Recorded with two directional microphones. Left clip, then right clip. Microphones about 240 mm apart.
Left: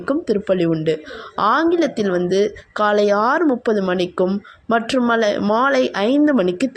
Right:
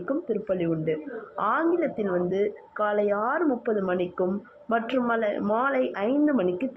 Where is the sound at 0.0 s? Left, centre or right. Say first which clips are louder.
Left 8 dB; left.